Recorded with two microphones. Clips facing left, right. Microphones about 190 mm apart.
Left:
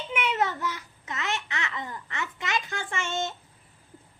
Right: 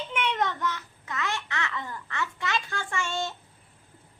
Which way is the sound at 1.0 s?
20° left (ahead or behind).